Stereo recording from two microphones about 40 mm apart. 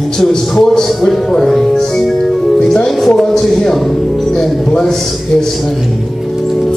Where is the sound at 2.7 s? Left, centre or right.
Centre.